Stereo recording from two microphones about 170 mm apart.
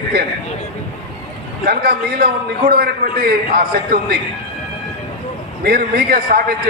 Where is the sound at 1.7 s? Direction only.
60° right (ahead or behind).